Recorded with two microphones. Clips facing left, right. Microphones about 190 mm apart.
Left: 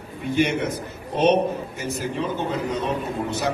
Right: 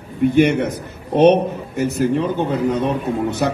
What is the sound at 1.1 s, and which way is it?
A man's voice, 60° right (ahead or behind).